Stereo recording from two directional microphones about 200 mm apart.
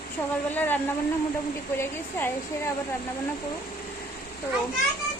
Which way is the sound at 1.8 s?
10° left (ahead or behind).